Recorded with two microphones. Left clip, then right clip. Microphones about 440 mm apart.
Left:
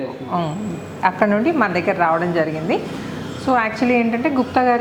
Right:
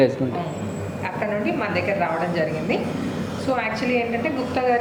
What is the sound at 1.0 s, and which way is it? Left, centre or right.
A woman's voice, left.